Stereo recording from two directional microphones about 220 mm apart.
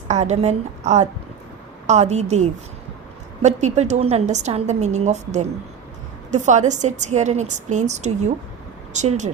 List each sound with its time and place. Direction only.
0.1 s a woman's voice: 30° right (ahead or behind)